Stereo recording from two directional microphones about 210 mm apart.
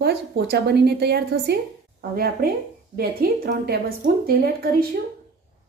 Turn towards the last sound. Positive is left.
turn(degrees=-45)  # may be behind; listen again after turning